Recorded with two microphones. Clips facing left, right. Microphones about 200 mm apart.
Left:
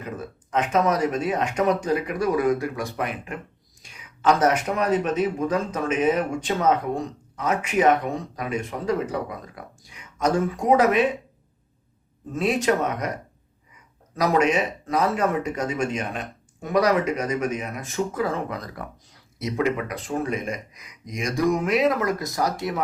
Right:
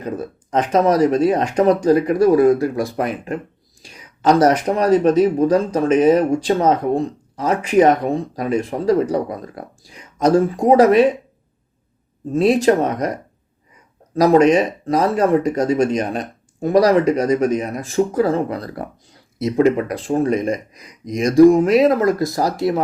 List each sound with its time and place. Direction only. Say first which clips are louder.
0.0 s speech: right 8 dB; 35° right (ahead or behind)
12.3 s speech: right 8 dB; 35° right (ahead or behind)
14.2 s speech: right 8 dB; 35° right (ahead or behind)